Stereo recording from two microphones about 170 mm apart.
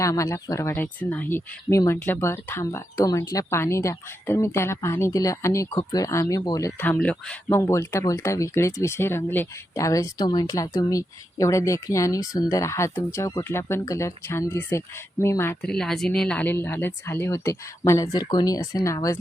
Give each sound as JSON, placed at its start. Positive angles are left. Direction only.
{"t": 0.0, "sound": "speech", "side_deg": 20}
{"t": 15.6, "sound": "speech", "side_deg": 5}